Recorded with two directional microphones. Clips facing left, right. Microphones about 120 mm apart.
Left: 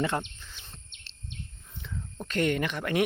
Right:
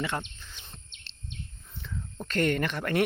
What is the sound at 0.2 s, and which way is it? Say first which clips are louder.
Speech: left 2 dB; 5° left (ahead or behind).